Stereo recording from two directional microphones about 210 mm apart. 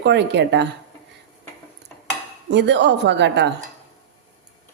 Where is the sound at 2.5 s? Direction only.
55° right (ahead or behind).